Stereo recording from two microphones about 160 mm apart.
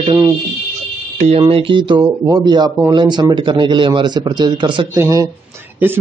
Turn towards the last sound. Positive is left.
turn(degrees=-15)  # may be behind; listen again after turning